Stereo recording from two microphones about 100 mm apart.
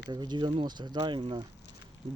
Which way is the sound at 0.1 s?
45° right (ahead or behind).